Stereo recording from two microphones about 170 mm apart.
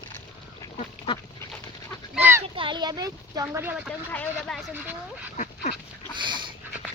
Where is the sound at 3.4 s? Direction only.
10° right (ahead or behind).